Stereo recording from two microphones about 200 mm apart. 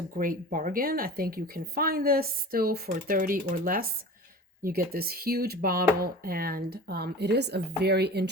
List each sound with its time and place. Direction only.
0.2 s a woman's voice: 45° right (ahead or behind)